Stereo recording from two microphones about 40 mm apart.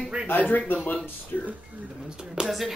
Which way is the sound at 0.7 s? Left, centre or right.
Left.